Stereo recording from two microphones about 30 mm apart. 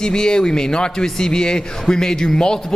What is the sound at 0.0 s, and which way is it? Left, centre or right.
A man's voice, left.